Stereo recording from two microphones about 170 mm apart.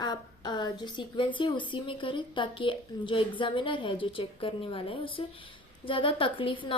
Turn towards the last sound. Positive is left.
turn(degrees=30)  # may be behind; listen again after turning